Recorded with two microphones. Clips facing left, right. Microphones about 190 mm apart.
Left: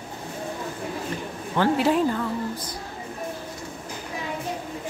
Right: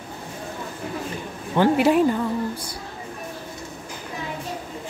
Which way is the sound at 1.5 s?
15° right (ahead or behind).